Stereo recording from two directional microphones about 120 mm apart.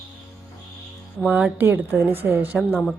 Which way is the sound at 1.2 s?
10° right (ahead or behind).